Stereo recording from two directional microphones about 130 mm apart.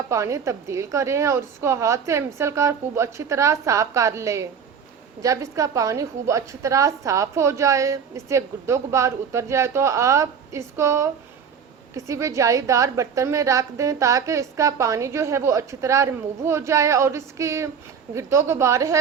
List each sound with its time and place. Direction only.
0.1 s a woman's voice: 25° right (ahead or behind)